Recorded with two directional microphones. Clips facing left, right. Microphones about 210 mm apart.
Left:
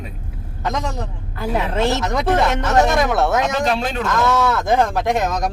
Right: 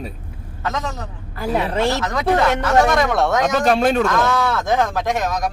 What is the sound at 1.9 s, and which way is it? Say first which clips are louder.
Speech: even; 25° left (ahead or behind).